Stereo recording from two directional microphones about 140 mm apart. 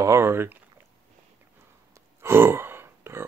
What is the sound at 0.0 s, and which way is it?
Speech, 20° right (ahead or behind).